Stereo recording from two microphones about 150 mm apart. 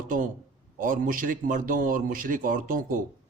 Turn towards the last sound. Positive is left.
turn(degrees=-65)  # may be behind; listen again after turning